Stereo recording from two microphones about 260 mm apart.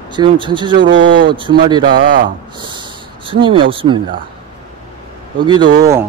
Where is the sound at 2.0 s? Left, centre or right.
Right.